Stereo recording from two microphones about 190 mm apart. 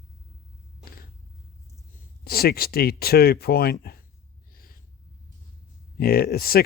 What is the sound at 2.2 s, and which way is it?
Speech, 55° left (ahead or behind).